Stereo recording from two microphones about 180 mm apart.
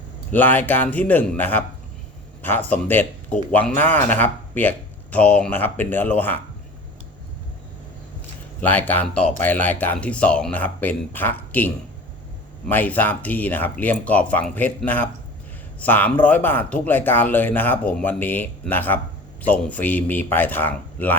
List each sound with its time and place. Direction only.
0.3 s speech: 10° left (ahead or behind)
8.6 s speech: 10° left (ahead or behind)